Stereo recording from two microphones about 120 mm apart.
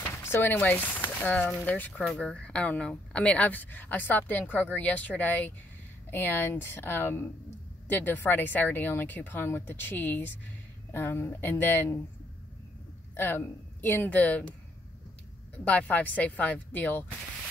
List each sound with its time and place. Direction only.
0.1 s a woman's voice: 20° left (ahead or behind)
13.1 s a woman's voice: 15° left (ahead or behind)
15.6 s a woman's voice: 15° left (ahead or behind)